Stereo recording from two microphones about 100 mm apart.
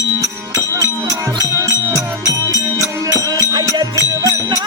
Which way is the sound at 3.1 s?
35° right (ahead or behind).